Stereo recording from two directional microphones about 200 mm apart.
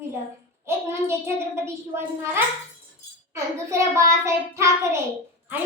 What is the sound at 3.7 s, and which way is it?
Child singing, 15° right (ahead or behind).